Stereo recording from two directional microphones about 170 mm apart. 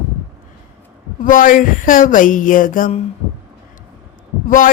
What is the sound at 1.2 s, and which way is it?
Speech, 55° left (ahead or behind).